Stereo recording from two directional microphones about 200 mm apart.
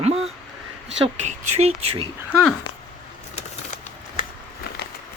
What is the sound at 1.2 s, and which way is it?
Speech, 35° right (ahead or behind).